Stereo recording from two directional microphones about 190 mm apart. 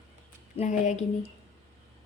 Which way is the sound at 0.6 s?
40° left (ahead or behind).